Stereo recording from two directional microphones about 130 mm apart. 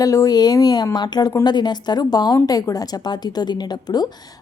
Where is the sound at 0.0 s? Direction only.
25° left (ahead or behind).